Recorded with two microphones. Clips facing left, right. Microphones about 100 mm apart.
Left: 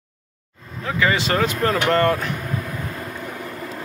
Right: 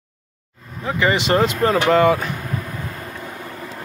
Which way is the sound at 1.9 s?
10° right (ahead or behind).